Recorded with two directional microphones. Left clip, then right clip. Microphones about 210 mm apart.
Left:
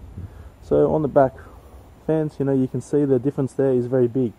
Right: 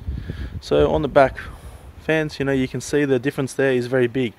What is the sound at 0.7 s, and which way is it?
Speech, 35° right (ahead or behind).